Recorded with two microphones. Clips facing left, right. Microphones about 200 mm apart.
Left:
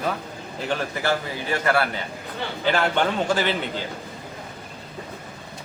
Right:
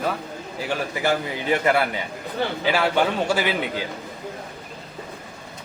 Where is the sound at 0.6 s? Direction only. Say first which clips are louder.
Right 1 dB; 15° right (ahead or behind).